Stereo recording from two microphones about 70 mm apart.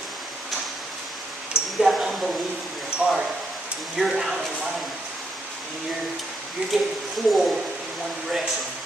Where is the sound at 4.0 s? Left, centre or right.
Centre.